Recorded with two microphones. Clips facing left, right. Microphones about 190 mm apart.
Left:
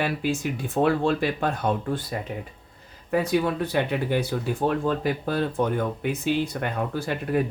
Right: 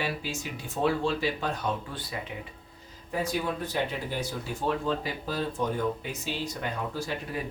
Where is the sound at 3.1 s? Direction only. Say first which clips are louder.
Left 7 dB; 65° left (ahead or behind).